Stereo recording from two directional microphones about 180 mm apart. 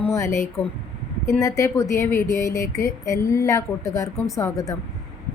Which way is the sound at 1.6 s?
15° left (ahead or behind).